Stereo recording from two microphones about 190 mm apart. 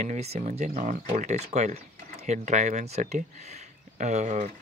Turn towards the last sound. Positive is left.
turn(degrees=-35)  # may be behind; listen again after turning